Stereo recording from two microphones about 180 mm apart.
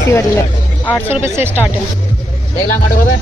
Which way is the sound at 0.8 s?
10° left (ahead or behind).